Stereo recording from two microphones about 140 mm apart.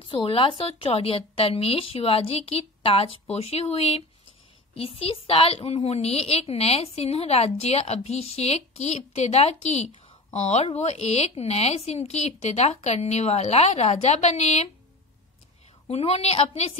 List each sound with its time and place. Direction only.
0.1 s a woman's voice: 40° left (ahead or behind)
15.9 s a woman's voice: 50° left (ahead or behind)